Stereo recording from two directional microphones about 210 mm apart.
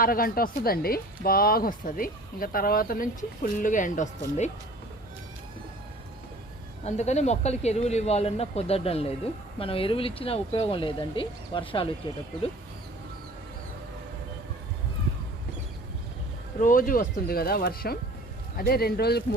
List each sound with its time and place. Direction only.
0.0 s speech: 45° left (ahead or behind)
6.8 s speech: 30° left (ahead or behind)
16.6 s speech: 40° left (ahead or behind)